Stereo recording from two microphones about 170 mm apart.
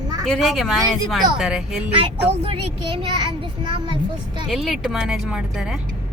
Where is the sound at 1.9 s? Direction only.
35° right (ahead or behind).